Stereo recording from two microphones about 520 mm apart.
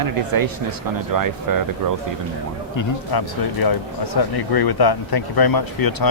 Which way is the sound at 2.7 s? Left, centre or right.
Left.